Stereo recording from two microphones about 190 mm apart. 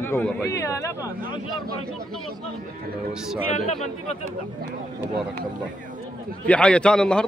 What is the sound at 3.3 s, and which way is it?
Speech, centre (ahead or behind).